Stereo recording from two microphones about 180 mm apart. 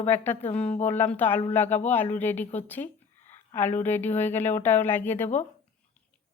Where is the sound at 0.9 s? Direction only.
10° left (ahead or behind).